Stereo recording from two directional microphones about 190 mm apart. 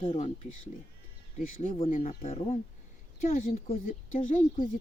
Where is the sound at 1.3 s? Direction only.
45° left (ahead or behind).